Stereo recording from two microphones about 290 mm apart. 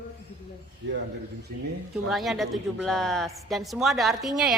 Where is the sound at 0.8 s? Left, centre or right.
Right.